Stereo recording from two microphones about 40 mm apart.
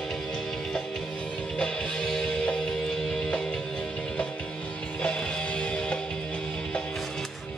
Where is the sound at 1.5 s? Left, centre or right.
Left.